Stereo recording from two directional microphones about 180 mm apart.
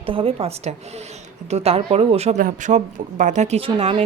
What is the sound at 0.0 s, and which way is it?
A woman's voice, 30° right (ahead or behind).